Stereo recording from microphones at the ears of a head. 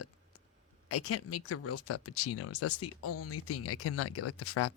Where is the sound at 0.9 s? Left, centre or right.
Left.